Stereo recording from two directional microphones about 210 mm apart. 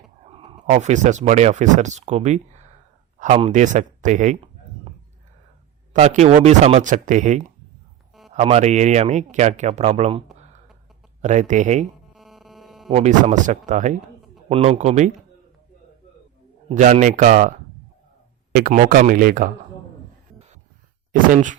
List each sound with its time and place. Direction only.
0.3 s speech: 25° right (ahead or behind)
5.9 s speech: 35° right (ahead or behind)
12.1 s a sound: centre (ahead or behind)
12.9 s a man's voice: 30° right (ahead or behind)
16.6 s speech: 35° right (ahead or behind)
21.1 s speech: 35° right (ahead or behind)